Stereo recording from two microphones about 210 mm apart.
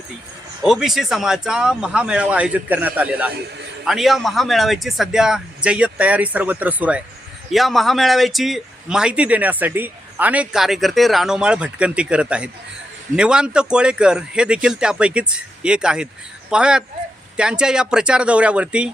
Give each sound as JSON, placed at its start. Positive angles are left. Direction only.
{"t": 0.6, "sound": "speech", "side_deg": 0}